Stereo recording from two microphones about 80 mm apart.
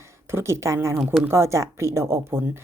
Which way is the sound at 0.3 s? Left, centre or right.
Right.